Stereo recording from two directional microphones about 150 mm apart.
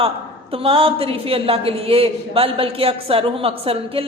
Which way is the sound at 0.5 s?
40° right (ahead or behind).